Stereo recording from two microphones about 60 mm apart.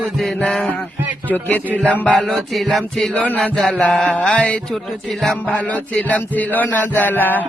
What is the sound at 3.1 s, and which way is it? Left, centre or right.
Music, left.